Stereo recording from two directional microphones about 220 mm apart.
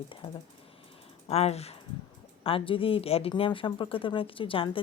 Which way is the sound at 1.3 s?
30° left (ahead or behind).